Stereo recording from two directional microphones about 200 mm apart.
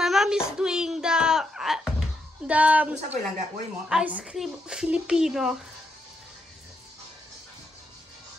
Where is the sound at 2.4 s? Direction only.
5° right (ahead or behind).